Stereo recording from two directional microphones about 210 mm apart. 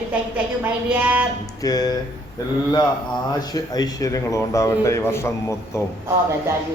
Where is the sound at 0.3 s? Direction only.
5° right (ahead or behind).